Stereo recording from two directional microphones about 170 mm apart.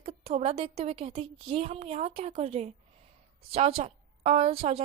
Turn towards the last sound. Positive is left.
turn(degrees=-35)  # may be behind; listen again after turning